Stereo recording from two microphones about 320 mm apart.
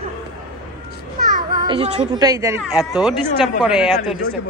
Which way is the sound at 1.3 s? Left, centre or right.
Right.